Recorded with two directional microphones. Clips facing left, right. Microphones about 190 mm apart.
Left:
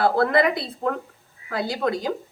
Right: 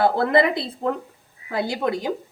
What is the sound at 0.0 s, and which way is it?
A woman's voice, 20° right (ahead or behind).